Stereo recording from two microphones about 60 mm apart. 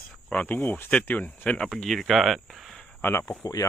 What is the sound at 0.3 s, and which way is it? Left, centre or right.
Speech, left.